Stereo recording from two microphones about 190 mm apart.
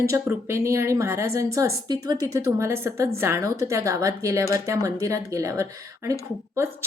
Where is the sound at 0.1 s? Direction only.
15° right (ahead or behind).